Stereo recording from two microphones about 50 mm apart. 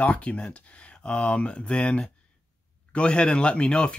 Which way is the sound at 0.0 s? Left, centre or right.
Left.